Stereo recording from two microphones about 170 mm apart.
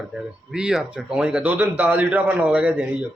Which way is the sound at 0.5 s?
5° right (ahead or behind).